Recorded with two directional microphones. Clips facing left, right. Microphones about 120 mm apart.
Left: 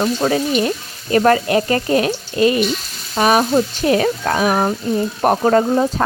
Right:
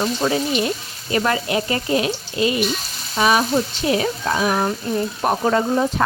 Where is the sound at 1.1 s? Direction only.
45° left (ahead or behind).